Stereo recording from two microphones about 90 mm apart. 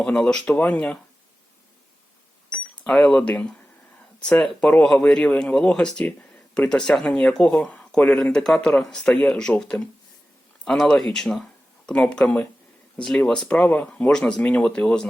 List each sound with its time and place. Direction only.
0.0 s speech: 10° left (ahead or behind)
2.9 s speech: 10° left (ahead or behind)